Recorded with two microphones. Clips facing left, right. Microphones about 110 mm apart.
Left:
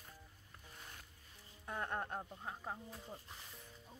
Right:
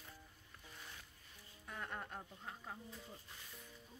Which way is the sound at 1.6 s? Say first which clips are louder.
Left 6 dB; 30° left (ahead or behind).